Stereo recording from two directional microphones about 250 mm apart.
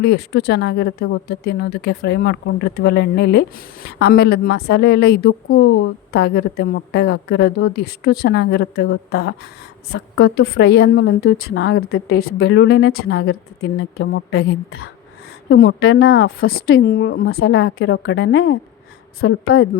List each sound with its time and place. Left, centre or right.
0.0 s a woman's voice: left
13.9 s a woman's voice: left